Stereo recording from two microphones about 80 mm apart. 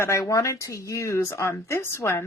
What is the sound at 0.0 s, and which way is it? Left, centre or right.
A woman's voice, left.